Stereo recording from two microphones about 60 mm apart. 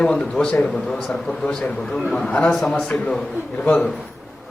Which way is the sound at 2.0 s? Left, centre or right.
Centre.